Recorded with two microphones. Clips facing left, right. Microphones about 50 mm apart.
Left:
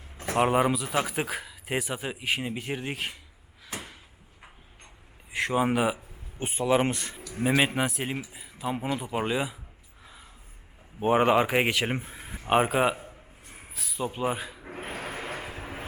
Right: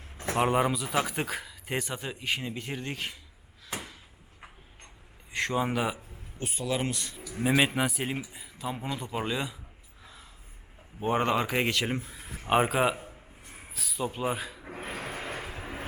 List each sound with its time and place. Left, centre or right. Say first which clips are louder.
0.2 s a man's voice: left 2 dB; centre
5.3 s a sound: left 2 dB; centre
5.5 s a man's voice: left 5 dB; centre
6.4 s speech: left 7 dB; left
7.2 s a man's voice: even; centre
11.0 s a man's voice: left 5 dB; centre
12.5 s a sound: left 2 dB; centre
14.8 s vehicle: left 1 dB; centre